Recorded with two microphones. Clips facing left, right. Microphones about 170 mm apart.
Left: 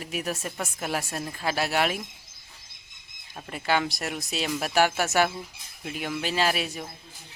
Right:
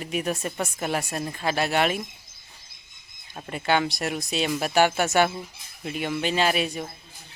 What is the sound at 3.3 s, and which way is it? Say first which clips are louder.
Speech: right 2 dB; centre (ahead or behind).